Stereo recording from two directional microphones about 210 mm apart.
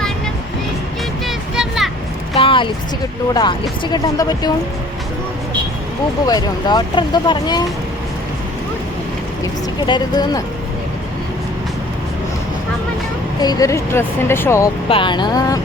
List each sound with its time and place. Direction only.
1.3 s a sound: centre (ahead or behind)
2.4 s a sound: 25° left (ahead or behind)
3.3 s speech: 20° left (ahead or behind)
6.2 s speech: 20° left (ahead or behind)
9.8 s speech: 20° left (ahead or behind)
13.4 s speech: 15° left (ahead or behind)
14.8 s speech: 25° left (ahead or behind)